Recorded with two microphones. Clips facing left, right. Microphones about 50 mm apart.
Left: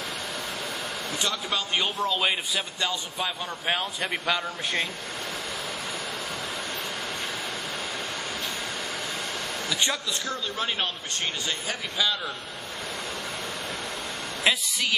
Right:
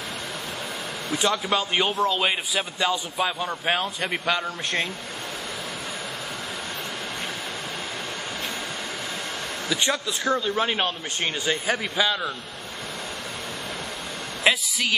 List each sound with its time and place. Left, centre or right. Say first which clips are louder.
1.1 s a man's voice: right 7 dB; centre
9.7 s speech: right 4 dB; centre
10.3 s a man's voice: right 8 dB; centre
14.4 s a sound: right 3 dB; centre